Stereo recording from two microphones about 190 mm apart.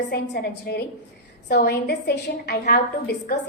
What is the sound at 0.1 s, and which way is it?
A woman's voice, 55° left (ahead or behind).